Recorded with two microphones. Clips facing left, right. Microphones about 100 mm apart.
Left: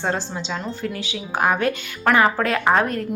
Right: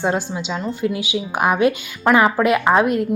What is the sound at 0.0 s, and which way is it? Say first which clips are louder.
Speech: right 4 dB; 15° right (ahead or behind).